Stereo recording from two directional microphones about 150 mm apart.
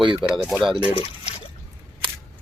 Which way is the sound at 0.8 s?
40° left (ahead or behind).